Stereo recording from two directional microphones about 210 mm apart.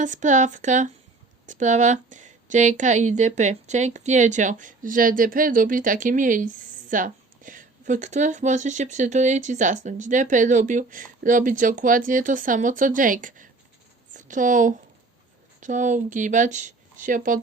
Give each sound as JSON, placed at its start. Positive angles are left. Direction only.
{"t": 0.0, "sound": "a woman's voice", "side_deg": -35}